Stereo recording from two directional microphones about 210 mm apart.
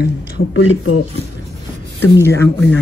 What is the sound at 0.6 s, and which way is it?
Speech, 80° left.